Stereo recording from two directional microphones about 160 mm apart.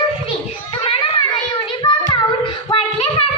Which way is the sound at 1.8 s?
30° left (ahead or behind).